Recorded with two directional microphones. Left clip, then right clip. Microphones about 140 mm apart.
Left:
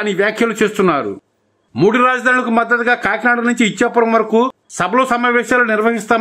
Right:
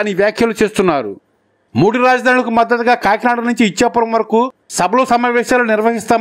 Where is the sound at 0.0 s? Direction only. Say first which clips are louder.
Right 2 dB; 45° right (ahead or behind).